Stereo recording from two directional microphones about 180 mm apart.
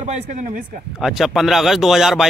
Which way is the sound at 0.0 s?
45° right (ahead or behind).